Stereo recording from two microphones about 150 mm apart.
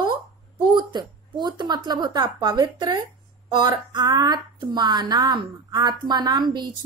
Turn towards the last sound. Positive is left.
turn(degrees=-30)  # may be behind; listen again after turning